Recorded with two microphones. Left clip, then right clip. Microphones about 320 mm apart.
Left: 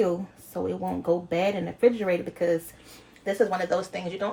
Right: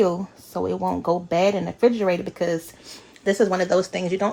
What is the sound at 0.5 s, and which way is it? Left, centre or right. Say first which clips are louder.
Speech: right 5 dB; right.